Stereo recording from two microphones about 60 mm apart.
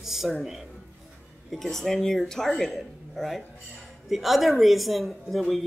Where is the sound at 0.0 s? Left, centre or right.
Centre.